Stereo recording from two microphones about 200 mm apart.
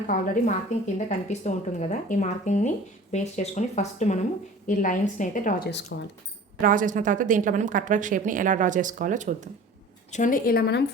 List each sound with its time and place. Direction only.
0.1 s speech: 40° left (ahead or behind)
6.6 s a woman's voice: 45° right (ahead or behind)
10.1 s a woman's voice: 40° left (ahead or behind)